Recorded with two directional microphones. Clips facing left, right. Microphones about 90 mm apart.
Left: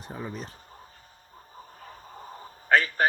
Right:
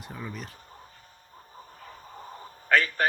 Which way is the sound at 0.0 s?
30° left (ahead or behind).